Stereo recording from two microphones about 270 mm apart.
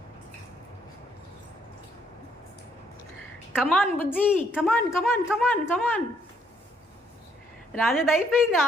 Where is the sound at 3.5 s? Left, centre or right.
Centre.